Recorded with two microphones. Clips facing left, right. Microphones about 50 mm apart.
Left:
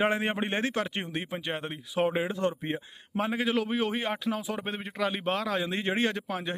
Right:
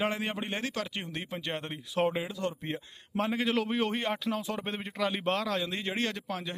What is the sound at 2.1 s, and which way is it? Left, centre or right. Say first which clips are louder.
Speech: left 5 dB; left.